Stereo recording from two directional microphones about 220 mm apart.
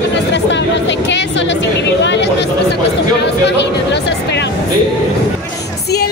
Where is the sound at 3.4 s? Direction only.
50° left (ahead or behind).